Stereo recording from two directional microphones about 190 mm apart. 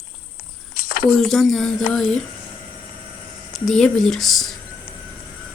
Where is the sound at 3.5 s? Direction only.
Centre (ahead or behind).